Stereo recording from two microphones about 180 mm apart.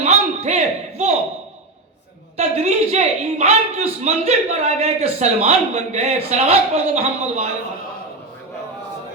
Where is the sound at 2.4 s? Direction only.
35° right (ahead or behind).